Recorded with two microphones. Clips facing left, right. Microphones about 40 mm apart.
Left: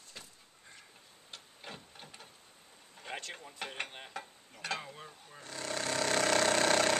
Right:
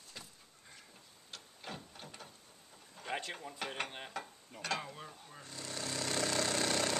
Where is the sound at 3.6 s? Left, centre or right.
Centre.